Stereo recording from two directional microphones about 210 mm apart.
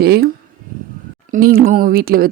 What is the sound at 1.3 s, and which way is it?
Speech, 45° right (ahead or behind).